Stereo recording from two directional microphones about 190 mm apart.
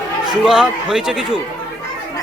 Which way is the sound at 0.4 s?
5° right (ahead or behind).